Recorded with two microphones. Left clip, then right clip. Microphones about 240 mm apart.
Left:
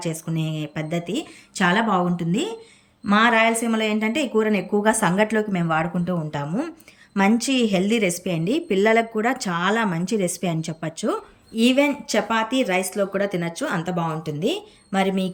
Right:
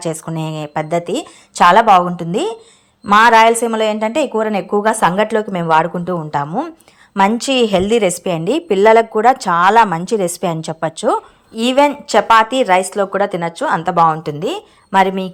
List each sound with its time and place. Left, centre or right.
0.0 s a woman's voice: centre
14.3 s speech: right